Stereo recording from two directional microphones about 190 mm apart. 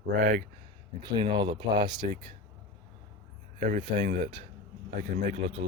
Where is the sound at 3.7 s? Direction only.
45° right (ahead or behind).